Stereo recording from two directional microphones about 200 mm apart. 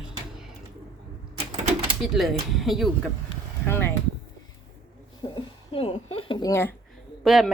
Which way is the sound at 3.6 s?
10° left (ahead or behind).